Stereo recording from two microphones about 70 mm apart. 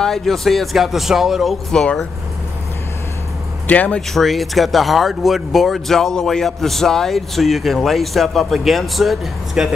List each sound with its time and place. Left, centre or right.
0.0 s speech: centre
3.6 s speech: left
4.1 s speech: centre